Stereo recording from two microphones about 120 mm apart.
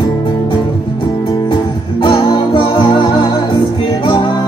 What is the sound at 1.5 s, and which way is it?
Music, 45° left (ahead or behind).